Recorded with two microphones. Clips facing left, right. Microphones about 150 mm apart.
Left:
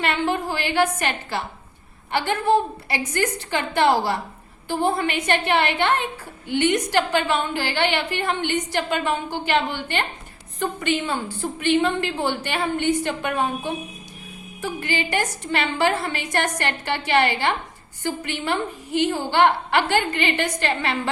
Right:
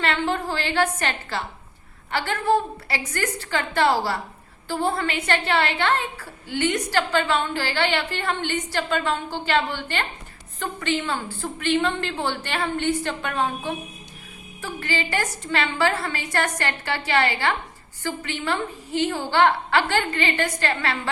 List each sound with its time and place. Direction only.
0.0 s a woman's voice: 15° left (ahead or behind)